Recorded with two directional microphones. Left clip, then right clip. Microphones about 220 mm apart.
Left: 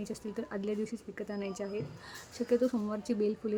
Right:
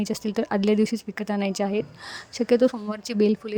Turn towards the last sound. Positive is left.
turn(degrees=-40)  # may be behind; listen again after turning